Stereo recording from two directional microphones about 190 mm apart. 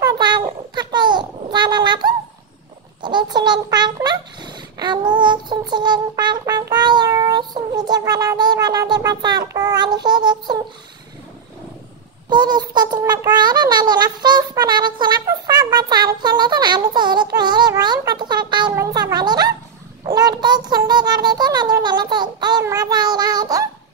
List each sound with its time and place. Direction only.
0.0 s a sound: 20° right (ahead or behind)
9.5 s child singing: 20° right (ahead or behind)
12.3 s child singing: 25° right (ahead or behind)